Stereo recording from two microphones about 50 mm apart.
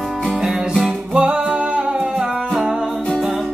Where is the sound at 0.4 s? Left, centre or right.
Centre.